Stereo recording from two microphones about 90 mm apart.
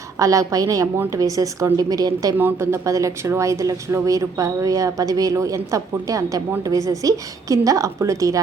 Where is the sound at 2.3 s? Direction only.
25° right (ahead or behind).